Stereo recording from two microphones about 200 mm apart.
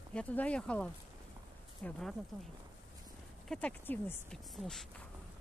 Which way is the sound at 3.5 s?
5° left (ahead or behind).